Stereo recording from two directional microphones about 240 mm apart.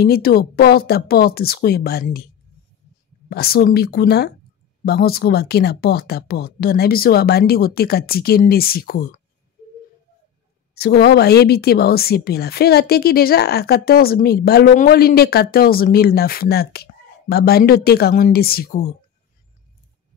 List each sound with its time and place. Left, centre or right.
0.0 s a woman's voice: left
3.3 s a woman's voice: left
10.7 s a woman's voice: left